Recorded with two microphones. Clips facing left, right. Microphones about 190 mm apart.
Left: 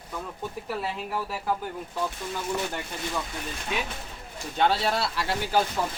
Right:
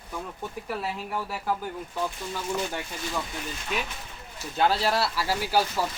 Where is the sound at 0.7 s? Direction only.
Centre (ahead or behind).